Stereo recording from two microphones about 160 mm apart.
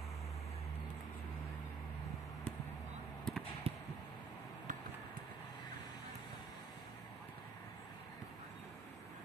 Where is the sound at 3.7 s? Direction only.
35° right (ahead or behind).